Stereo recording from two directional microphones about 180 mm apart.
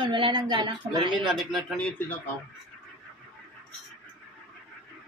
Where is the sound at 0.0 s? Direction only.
25° right (ahead or behind).